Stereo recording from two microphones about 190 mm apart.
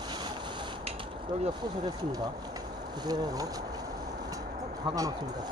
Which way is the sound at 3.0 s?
20° right (ahead or behind).